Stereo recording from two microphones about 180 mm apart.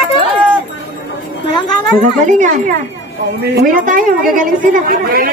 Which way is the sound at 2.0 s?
45° right (ahead or behind).